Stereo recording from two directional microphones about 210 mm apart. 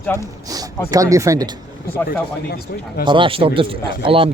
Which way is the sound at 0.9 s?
15° right (ahead or behind).